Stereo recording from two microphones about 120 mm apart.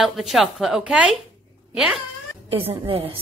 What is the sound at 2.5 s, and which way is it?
Speech, 55° right (ahead or behind).